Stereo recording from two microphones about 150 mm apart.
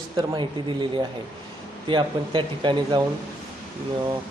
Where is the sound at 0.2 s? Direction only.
30° right (ahead or behind).